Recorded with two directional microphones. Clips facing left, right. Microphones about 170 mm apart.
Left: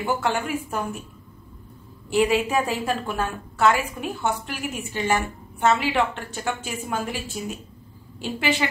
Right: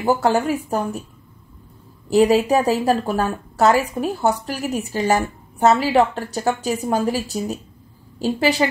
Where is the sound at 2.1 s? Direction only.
40° right (ahead or behind).